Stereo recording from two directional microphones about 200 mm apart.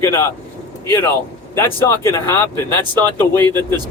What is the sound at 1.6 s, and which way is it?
Speech, 10° left (ahead or behind).